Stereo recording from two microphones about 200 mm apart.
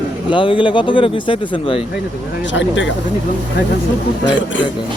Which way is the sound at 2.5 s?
65° left (ahead or behind).